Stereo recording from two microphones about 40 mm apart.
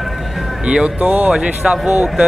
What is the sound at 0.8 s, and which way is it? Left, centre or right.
Speech, right.